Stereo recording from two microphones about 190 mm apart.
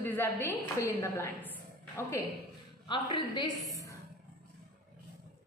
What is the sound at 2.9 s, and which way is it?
A woman's voice, 25° left (ahead or behind).